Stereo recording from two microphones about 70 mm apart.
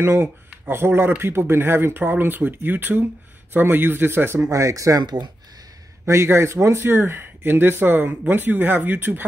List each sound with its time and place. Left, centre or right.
0.0 s speech: right
4.4 s speech: right
5.0 s speech: right
6.0 s speech: right